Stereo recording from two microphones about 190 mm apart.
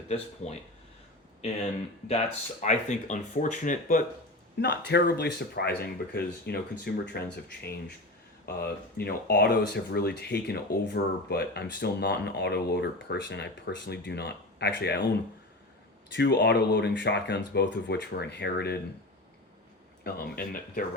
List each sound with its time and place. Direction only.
2.0 s speech: 35° left (ahead or behind)
4.9 s speech: 60° left (ahead or behind)
16.1 s speech: 65° left (ahead or behind)
20.1 s speech: 50° left (ahead or behind)